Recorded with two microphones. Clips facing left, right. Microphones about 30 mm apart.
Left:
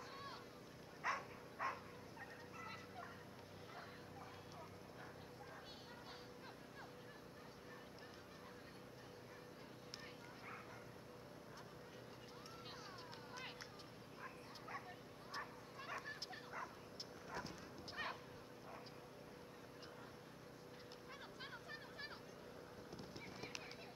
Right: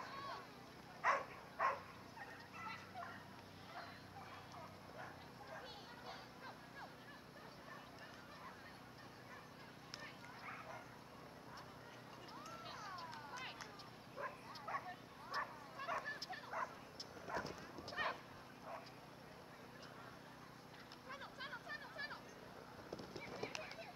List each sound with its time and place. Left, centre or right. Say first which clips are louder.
0.1 s run: right 4 dB; centre
1.0 s dog: right 6 dB; centre
1.6 s turkey: right 6 dB; centre
12.6 s a sound: right 3 dB; centre
14.1 s bow-wow: right 7 dB; centre
15.8 s bow-wow: right 5 dB; centre
17.3 s dog: right 5 dB; centre
21.1 s a sound: right 5 dB; centre
22.8 s horse: right 6 dB; centre